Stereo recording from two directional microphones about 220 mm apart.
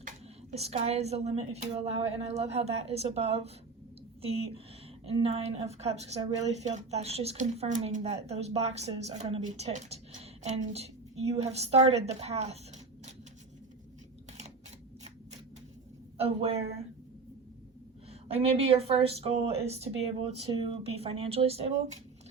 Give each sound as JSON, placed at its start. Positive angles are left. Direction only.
{"t": 0.5, "sound": "a woman's voice", "side_deg": -30}
{"t": 5.0, "sound": "a woman's voice", "side_deg": -25}
{"t": 16.1, "sound": "a woman's voice", "side_deg": -25}
{"t": 18.3, "sound": "a woman's voice", "side_deg": -25}